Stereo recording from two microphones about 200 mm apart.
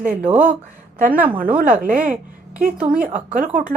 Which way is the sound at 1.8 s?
45° right (ahead or behind).